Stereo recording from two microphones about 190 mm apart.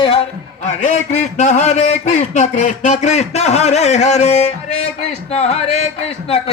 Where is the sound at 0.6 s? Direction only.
40° left (ahead or behind).